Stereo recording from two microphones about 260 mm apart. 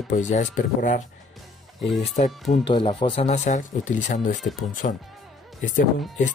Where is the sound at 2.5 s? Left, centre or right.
Centre.